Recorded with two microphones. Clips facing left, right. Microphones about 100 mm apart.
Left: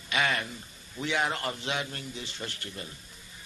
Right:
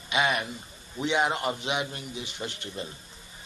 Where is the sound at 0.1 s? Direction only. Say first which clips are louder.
Right 3 dB; 20° right (ahead or behind).